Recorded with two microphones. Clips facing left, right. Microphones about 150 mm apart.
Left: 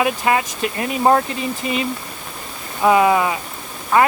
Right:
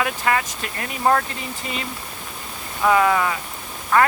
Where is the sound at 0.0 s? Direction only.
20° left (ahead or behind).